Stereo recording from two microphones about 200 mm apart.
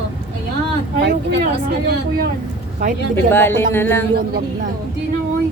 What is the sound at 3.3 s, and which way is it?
Speech, 10° left (ahead or behind).